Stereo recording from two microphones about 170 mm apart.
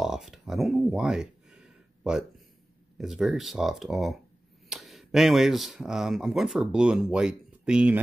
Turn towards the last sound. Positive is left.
turn(degrees=-5)  # may be behind; listen again after turning